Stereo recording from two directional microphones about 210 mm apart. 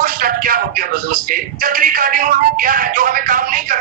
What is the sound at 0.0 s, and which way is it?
Speech, 40° right (ahead or behind).